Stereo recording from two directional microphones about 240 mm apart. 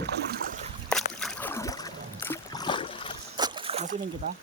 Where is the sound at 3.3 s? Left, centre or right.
Centre.